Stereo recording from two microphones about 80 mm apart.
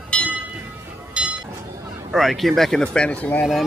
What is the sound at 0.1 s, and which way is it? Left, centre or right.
Train, centre.